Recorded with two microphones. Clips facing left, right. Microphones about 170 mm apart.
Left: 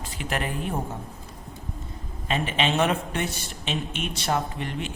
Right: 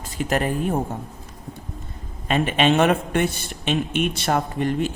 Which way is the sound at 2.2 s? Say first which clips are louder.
Right 6 dB; 55° right (ahead or behind).